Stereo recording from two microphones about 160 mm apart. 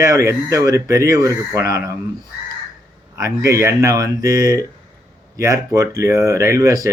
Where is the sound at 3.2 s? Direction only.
20° right (ahead or behind).